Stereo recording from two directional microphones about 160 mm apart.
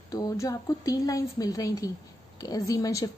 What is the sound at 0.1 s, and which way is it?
A woman's voice, 20° left (ahead or behind).